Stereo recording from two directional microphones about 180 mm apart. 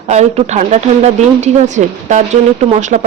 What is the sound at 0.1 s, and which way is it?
Speech, 40° right (ahead or behind).